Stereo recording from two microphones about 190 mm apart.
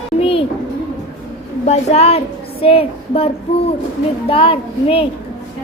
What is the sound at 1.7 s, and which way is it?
Speech, 35° left (ahead or behind).